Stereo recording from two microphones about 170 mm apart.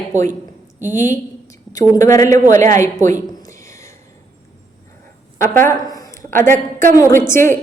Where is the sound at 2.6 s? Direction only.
15° left (ahead or behind).